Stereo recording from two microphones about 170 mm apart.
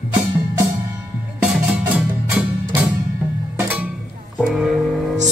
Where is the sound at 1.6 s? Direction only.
10° right (ahead or behind).